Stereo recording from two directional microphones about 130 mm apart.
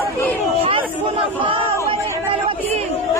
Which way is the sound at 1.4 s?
40° right (ahead or behind).